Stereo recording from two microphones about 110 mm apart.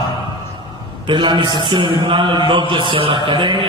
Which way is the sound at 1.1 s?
45° right (ahead or behind).